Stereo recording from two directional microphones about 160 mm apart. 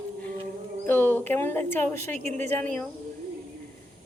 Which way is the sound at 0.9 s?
15° left (ahead or behind).